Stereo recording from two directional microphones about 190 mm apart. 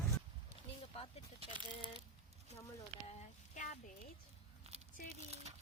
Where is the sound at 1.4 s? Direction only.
30° right (ahead or behind).